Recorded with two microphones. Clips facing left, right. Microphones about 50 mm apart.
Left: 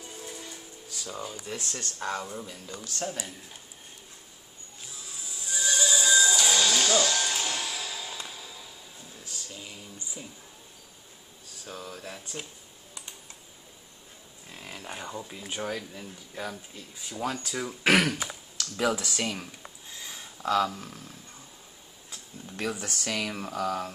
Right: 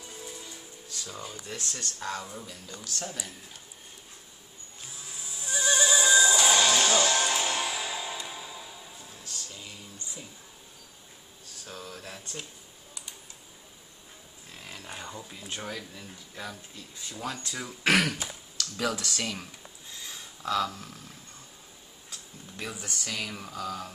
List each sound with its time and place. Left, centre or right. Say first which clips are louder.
0.5 s music: left 1 dB; centre
1.4 s speech: left 2 dB; centre
2.0 s speech: left 4 dB; left
5.2 s music: right 2 dB; right
9.2 s music: left 2 dB; centre
11.6 s a sound: left 2 dB; centre
14.5 s a sound: left 2 dB; centre
15.9 s speech: left 3 dB; centre
20.0 s a sound: left 2 dB; centre
22.8 s speech: left 3 dB; left